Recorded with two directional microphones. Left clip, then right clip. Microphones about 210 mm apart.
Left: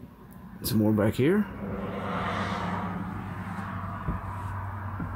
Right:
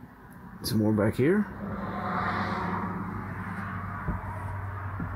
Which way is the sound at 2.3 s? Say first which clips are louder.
Right 1 dB; 45° left (ahead or behind).